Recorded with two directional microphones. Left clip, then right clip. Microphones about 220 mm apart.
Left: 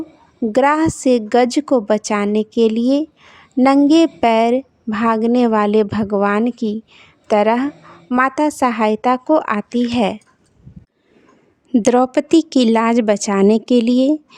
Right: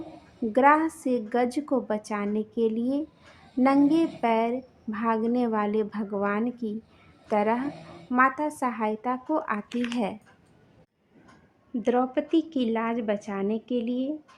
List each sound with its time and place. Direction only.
0.5 s a woman's voice: 45° left (ahead or behind)
11.7 s a woman's voice: 55° left (ahead or behind)